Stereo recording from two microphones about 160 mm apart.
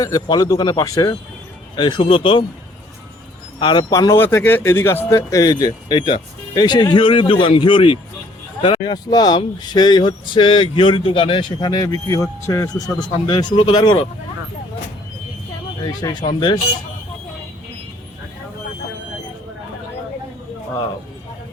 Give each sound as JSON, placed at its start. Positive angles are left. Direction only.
{"t": 0.0, "sound": "speech", "side_deg": 20}
{"t": 3.6, "sound": "speech", "side_deg": 30}
{"t": 15.8, "sound": "speech", "side_deg": 25}